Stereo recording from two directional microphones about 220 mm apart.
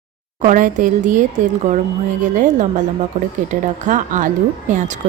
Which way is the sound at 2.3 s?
35° right (ahead or behind).